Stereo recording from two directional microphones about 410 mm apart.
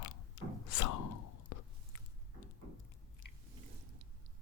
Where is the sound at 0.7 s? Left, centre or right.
Left.